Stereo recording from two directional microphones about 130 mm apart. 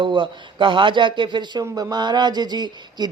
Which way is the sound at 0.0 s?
40° right (ahead or behind).